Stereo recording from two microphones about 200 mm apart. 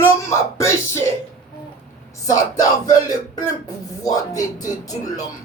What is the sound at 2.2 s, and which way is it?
Speech, 20° left (ahead or behind).